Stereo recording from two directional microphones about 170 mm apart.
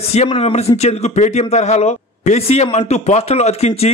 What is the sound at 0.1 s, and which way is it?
Speech, 40° left (ahead or behind).